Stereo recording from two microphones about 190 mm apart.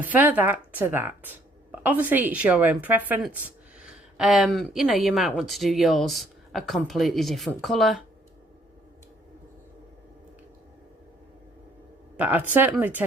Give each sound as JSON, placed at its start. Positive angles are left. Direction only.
{"t": 0.0, "sound": "a woman's voice", "side_deg": -10}
{"t": 12.1, "sound": "a woman's voice", "side_deg": -10}